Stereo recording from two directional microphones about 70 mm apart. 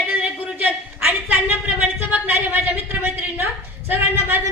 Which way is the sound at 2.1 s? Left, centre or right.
Right.